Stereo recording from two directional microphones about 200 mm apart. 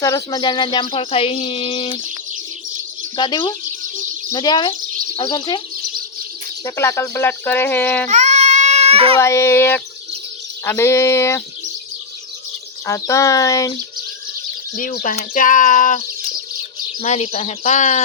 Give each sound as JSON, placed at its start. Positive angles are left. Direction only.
{"t": 0.0, "sound": "speech", "side_deg": 15}
{"t": 3.2, "sound": "speech", "side_deg": 20}
{"t": 6.7, "sound": "speech", "side_deg": 15}
{"t": 8.1, "sound": "baby cry", "side_deg": -35}
{"t": 9.1, "sound": "speech", "side_deg": 15}
{"t": 12.8, "sound": "speech", "side_deg": 15}
{"t": 14.8, "sound": "speech", "side_deg": 45}